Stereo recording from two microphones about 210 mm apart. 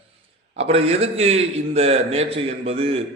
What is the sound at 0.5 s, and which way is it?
A man's voice, 30° right (ahead or behind).